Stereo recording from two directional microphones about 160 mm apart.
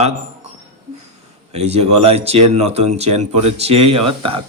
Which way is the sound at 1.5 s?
40° right (ahead or behind).